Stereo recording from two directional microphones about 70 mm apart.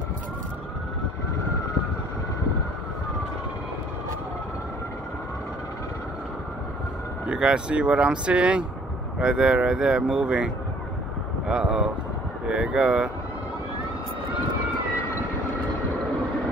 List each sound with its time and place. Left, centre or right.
7.2 s speech: centre